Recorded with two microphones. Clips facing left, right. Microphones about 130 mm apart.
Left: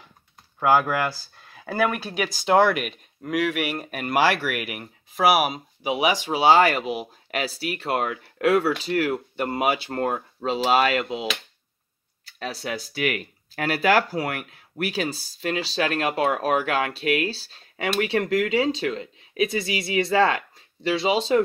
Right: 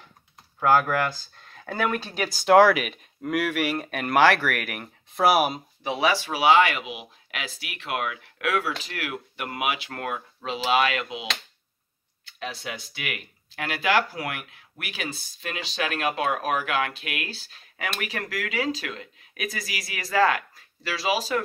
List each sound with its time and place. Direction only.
0.6 s speech: 10° left (ahead or behind)
5.9 s speech: 15° left (ahead or behind)
6.4 s speech: 35° left (ahead or behind)
12.3 s speech: 40° left (ahead or behind)